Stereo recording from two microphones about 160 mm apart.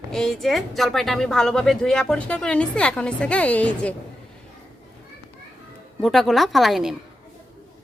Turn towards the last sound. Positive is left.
turn(degrees=0)  # may be behind; listen again after turning